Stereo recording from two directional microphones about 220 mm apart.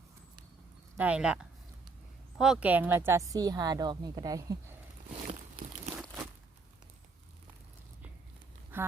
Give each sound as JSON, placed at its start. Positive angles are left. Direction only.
{"t": 0.9, "sound": "speech", "side_deg": -5}
{"t": 5.3, "sound": "a sound", "side_deg": -30}
{"t": 8.7, "sound": "speech", "side_deg": -10}